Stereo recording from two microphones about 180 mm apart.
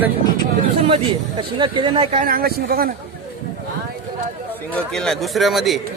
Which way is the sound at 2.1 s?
50° right (ahead or behind).